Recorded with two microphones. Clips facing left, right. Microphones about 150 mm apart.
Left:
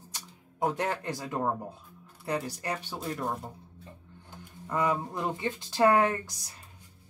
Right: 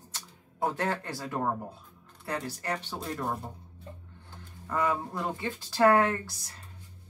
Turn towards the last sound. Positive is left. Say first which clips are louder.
# even
turn(degrees=15)  # may be behind; listen again after turning